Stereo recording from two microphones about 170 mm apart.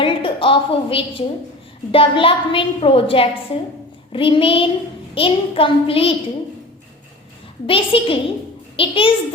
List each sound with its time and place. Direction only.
0.0 s a woman's voice: 30° left (ahead or behind)
7.7 s a woman's voice: 30° left (ahead or behind)